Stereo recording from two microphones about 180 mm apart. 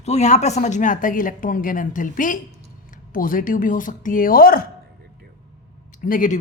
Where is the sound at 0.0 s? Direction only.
40° left (ahead or behind); by 4.7 s 55° left (ahead or behind).